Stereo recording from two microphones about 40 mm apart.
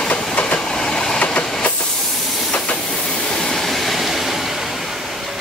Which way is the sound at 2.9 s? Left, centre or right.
Centre.